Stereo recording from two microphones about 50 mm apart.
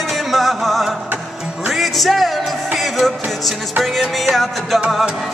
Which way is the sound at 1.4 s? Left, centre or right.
Centre.